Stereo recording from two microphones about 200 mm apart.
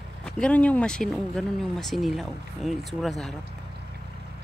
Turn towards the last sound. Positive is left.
turn(degrees=0)  # may be behind; listen again after turning